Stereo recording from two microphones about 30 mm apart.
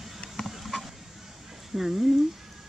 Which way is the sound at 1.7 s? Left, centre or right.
Right.